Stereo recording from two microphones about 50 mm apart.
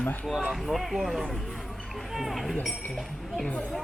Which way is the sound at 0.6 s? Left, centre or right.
Centre.